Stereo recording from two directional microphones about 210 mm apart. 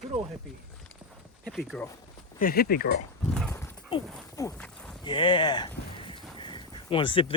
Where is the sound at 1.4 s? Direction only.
Centre (ahead or behind).